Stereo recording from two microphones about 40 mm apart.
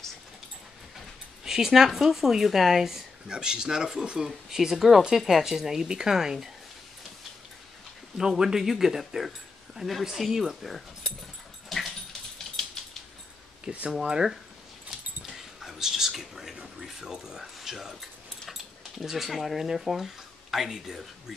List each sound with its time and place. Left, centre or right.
1.4 s speech: centre
3.3 s speech: right
8.2 s speech: centre
13.9 s speech: centre
14.9 s dog: centre
16.6 s speech: centre